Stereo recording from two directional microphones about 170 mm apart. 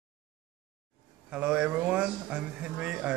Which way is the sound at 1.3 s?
5° right (ahead or behind).